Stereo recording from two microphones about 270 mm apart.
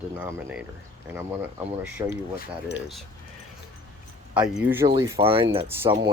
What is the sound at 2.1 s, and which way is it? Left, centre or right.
Speech, left.